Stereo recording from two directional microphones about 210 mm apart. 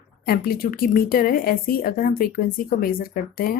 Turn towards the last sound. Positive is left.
turn(degrees=45)  # may be behind; listen again after turning